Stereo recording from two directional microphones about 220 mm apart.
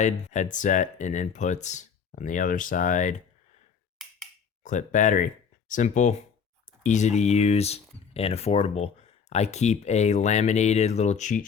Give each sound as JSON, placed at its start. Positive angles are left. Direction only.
{"t": 0.0, "sound": "speech", "side_deg": 35}
{"t": 4.6, "sound": "speech", "side_deg": 35}